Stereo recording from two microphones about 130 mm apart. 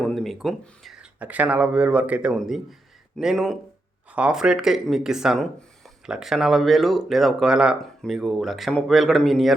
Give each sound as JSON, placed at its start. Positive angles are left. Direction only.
{"t": 0.0, "sound": "speech", "side_deg": 5}
{"t": 1.2, "sound": "speech", "side_deg": -10}